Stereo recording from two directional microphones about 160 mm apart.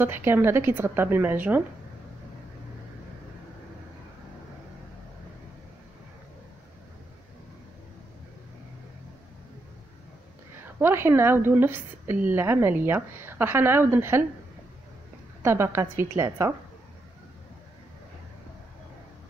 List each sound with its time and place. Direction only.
0.0 s a woman's voice: 15° right (ahead or behind)
10.8 s a woman's voice: 15° right (ahead or behind)
15.4 s a woman's voice: 15° right (ahead or behind)